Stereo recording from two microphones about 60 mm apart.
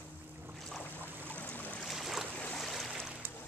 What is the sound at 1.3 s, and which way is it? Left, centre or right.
Boat, left.